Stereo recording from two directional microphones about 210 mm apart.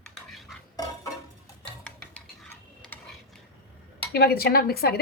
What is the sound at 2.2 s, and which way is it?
Stir, centre (ahead or behind).